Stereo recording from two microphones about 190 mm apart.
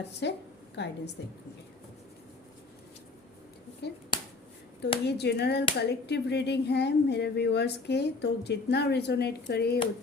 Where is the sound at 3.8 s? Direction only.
60° left (ahead or behind).